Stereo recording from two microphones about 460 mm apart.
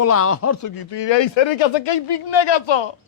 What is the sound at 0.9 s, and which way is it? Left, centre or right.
Speech, left.